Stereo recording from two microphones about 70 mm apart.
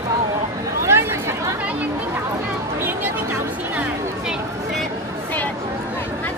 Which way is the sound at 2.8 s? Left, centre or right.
Right.